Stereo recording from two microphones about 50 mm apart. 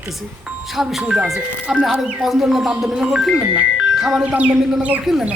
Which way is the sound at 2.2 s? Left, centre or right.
Centre.